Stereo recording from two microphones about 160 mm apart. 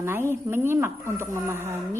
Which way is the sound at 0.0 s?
15° right (ahead or behind).